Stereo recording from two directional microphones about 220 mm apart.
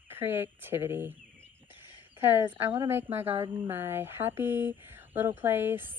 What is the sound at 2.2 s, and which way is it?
Speech, 10° right (ahead or behind).